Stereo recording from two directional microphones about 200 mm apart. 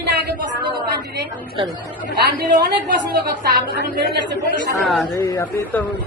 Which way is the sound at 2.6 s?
50° right (ahead or behind).